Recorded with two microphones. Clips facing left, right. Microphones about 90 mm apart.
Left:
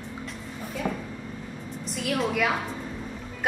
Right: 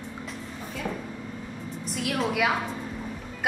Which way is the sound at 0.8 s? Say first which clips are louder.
Left 2 dB; 50° left (ahead or behind).